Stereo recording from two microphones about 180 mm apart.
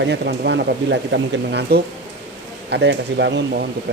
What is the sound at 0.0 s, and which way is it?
Speech, 70° right (ahead or behind).